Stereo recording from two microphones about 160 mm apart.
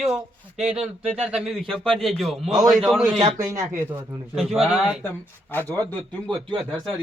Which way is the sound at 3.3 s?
20° right (ahead or behind).